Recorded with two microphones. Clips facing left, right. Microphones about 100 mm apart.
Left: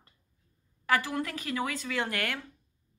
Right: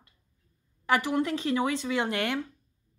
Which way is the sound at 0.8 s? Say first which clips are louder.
Right 3 dB; 20° right (ahead or behind).